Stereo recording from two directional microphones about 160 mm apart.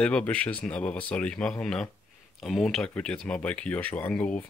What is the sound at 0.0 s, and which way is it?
Speech, 5° left (ahead or behind).